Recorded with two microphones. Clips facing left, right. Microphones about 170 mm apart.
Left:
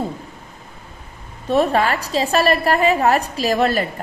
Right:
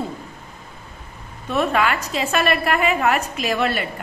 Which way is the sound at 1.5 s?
35° left (ahead or behind).